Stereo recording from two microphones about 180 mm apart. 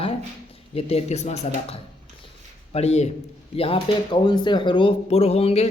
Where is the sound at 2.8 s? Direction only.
35° left (ahead or behind).